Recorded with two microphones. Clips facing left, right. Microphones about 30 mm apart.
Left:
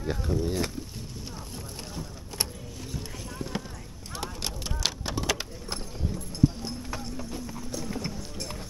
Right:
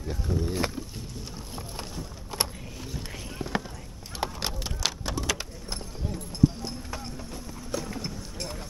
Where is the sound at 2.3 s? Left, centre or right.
Centre.